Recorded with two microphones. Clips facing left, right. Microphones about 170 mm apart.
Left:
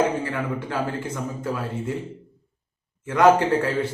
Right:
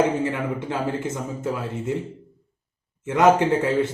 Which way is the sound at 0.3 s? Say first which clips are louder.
Right 2 dB; 20° right (ahead or behind).